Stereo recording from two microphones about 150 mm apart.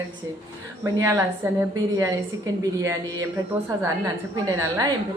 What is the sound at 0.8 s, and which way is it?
Speech, 20° right (ahead or behind).